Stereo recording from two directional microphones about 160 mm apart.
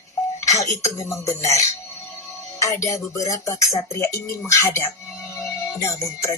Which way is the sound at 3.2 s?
20° left (ahead or behind).